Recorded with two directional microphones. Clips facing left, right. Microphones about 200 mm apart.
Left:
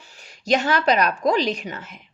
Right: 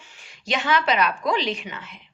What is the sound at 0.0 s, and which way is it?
A woman's voice, 40° left (ahead or behind).